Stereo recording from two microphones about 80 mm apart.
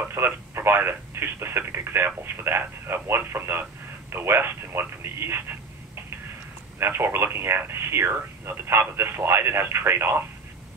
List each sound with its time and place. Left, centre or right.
0.1 s speech: right
6.8 s speech: right